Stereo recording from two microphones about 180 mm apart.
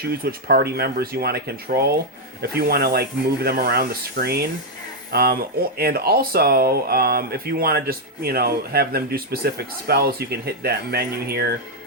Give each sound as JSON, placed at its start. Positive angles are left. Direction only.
{"t": 0.1, "sound": "speech", "side_deg": -55}